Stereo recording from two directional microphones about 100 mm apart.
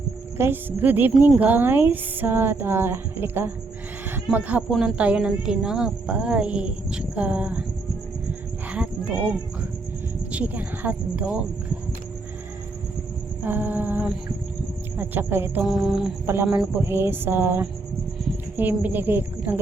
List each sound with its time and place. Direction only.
0.3 s speech: 20° right (ahead or behind)
8.7 s a sound: 10° right (ahead or behind)
10.3 s speech: 15° right (ahead or behind)
13.4 s speech: 20° right (ahead or behind)
15.6 s music: 5° right (ahead or behind)
16.2 s speech: 25° right (ahead or behind)